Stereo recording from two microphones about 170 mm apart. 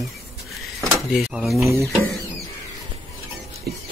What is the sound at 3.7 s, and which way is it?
Music, 70° right (ahead or behind).